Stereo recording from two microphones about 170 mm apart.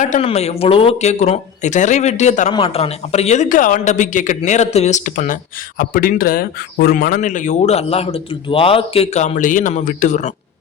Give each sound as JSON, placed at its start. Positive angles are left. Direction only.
{"t": 0.0, "sound": "speech", "side_deg": 40}
{"t": 2.5, "sound": "a man's voice", "side_deg": 30}